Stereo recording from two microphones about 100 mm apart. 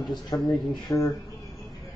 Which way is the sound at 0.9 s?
35° left (ahead or behind).